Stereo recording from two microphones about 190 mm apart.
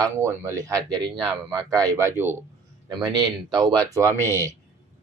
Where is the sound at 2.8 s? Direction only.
20° right (ahead or behind).